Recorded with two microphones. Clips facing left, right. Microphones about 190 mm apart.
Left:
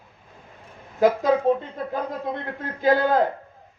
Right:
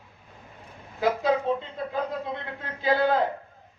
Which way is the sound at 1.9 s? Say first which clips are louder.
Left 2 dB; 50° left (ahead or behind).